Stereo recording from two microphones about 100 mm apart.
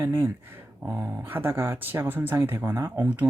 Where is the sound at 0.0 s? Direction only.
25° right (ahead or behind).